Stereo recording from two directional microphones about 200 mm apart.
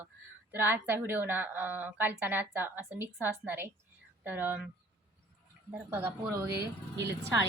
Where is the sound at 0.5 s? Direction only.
10° right (ahead or behind).